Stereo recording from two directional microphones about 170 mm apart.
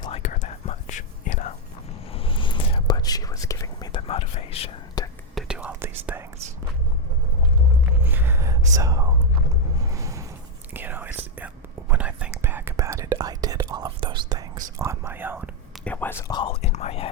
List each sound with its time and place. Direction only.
0.2 s whispering: 45° left (ahead or behind)
2.1 s whispering: 30° left (ahead or behind)
3.9 s whispering: 35° left (ahead or behind)
5.3 s whispering: centre (ahead or behind)
8.0 s whispering: 10° right (ahead or behind)
9.9 s a sound: 20° right (ahead or behind)
10.8 s whispering: 10° right (ahead or behind)
15.8 s whispering: 10° left (ahead or behind); by 17.1 s 35° left (ahead or behind)